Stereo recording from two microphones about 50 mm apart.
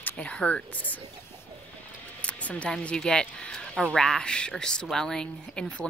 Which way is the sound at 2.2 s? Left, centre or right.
Left.